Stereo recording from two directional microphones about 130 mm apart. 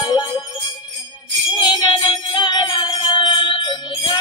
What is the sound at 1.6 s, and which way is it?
Music, 30° left (ahead or behind).